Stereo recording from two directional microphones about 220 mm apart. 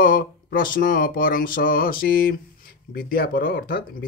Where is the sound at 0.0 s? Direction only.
40° left (ahead or behind).